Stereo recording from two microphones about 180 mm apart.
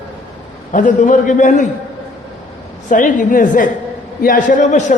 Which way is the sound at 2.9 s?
45° left (ahead or behind).